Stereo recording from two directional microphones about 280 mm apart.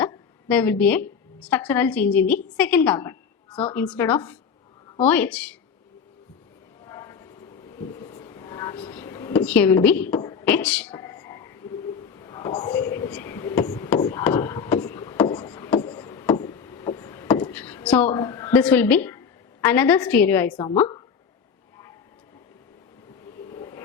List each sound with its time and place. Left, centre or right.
0.0 s a woman's voice: centre
6.8 s vehicle: centre
19.6 s a woman's voice: centre
23.5 s vehicle: centre